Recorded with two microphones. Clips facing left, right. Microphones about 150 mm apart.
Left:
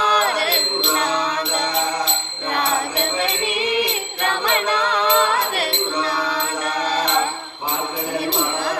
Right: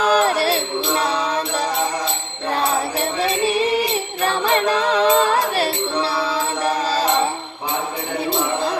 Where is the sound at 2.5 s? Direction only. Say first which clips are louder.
Right 2 dB; 35° right (ahead or behind).